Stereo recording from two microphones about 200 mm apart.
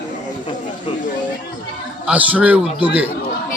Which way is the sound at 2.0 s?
5° right (ahead or behind).